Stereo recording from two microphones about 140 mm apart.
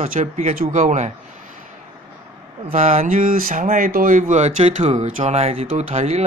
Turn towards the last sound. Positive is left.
turn(degrees=-50)  # may be behind; listen again after turning